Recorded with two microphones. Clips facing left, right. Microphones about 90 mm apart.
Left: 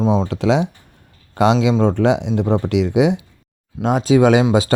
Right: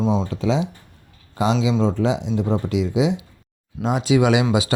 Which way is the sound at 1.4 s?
60° left (ahead or behind).